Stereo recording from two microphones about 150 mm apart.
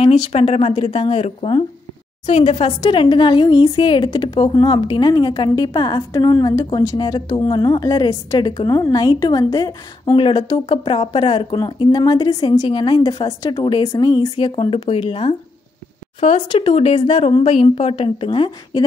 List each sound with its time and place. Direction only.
0.0 s a woman's voice: 40° left (ahead or behind)